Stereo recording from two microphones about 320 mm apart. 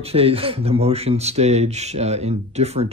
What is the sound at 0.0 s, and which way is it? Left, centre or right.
Speech, centre.